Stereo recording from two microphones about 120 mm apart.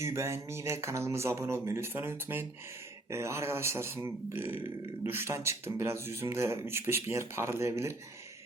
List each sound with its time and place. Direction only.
0.0 s speech: 25° right (ahead or behind)